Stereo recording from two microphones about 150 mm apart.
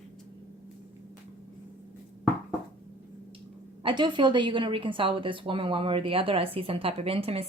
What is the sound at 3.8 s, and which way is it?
A woman's voice, 35° right (ahead or behind).